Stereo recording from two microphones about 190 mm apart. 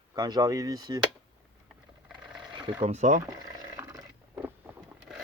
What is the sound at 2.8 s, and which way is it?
Speech, 35° right (ahead or behind).